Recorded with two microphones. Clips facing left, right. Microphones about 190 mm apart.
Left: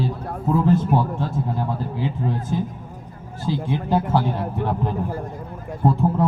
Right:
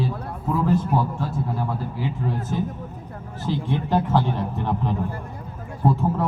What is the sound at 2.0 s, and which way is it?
A man's voice, 15° left (ahead or behind).